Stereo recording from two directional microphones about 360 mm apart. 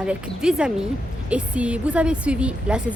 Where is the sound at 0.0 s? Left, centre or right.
Centre.